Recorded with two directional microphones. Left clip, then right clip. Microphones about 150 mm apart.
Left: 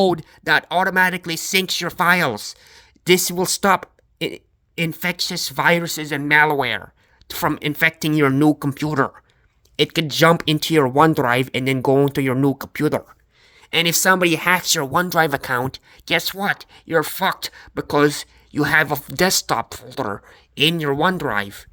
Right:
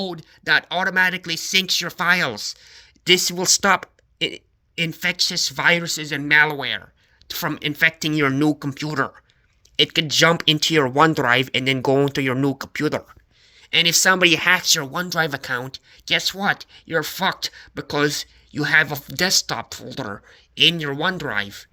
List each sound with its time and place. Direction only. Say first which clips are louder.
0.0 s speech: left 9 dB; 60° left (ahead or behind); by 13.0 s 35° left (ahead or behind)
13.6 s speech: right 1 dB; 50° left (ahead or behind)
14.2 s speech: right 1 dB; 30° left (ahead or behind)
14.6 s speech: left 2 dB; 45° left (ahead or behind)